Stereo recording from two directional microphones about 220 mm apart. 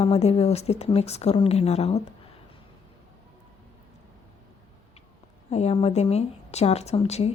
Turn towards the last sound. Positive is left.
turn(degrees=30)  # may be behind; listen again after turning